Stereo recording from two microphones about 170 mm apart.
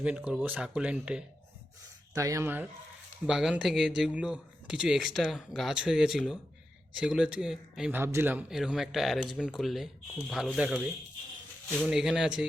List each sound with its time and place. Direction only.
0.0 s speech: 5° right (ahead or behind)
2.1 s speech: 20° right (ahead or behind)